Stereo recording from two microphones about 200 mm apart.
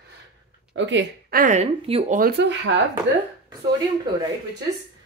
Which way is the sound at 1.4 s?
35° right (ahead or behind).